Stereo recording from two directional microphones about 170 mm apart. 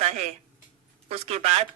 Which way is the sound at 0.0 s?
40° right (ahead or behind).